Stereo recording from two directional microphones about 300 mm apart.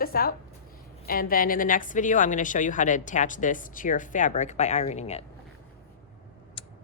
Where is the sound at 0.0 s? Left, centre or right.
Left.